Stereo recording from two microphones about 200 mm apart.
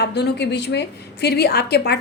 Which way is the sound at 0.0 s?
55° left (ahead or behind).